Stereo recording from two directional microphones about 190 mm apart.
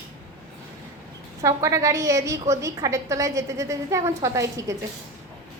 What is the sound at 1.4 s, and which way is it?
A woman's voice, 15° right (ahead or behind).